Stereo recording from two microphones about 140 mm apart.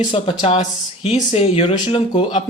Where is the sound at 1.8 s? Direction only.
35° left (ahead or behind).